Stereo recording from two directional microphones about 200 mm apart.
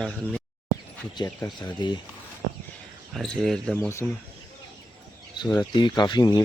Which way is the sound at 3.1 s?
Centre (ahead or behind).